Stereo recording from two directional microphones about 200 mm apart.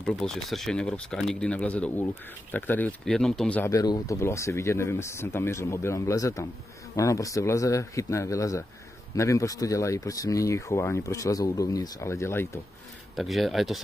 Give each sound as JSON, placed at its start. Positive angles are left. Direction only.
{"t": 0.0, "sound": "speech", "side_deg": 5}
{"t": 13.1, "sound": "speech", "side_deg": 0}